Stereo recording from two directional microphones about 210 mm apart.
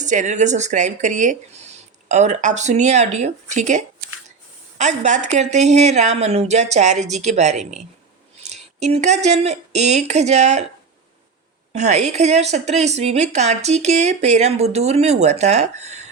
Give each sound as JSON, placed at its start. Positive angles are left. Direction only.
{"t": 0.0, "sound": "a woman's voice", "side_deg": -35}
{"t": 8.8, "sound": "a woman's voice", "side_deg": -35}
{"t": 11.7, "sound": "a woman's voice", "side_deg": -35}